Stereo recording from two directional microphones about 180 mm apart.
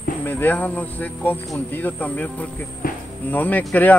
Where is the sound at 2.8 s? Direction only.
50° left (ahead or behind).